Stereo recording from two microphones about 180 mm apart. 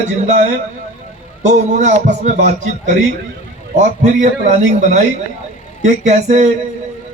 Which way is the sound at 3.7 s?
40° right (ahead or behind).